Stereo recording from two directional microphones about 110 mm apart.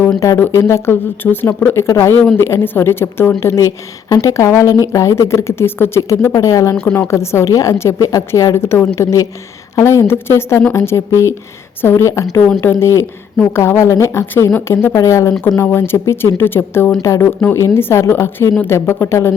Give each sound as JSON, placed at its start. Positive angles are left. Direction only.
{"t": 0.2, "sound": "speech", "side_deg": 25}